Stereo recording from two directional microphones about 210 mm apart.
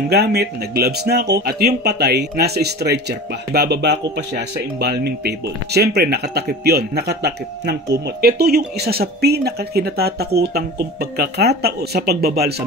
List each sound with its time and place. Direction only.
0.1 s speech: 50° right (ahead or behind)